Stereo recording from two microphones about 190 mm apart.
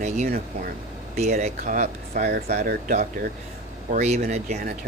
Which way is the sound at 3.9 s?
35° right (ahead or behind).